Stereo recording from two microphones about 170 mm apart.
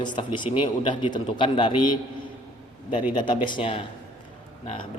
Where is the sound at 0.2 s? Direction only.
30° left (ahead or behind).